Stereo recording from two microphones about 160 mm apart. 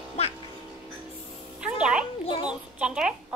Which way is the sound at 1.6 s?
5° right (ahead or behind).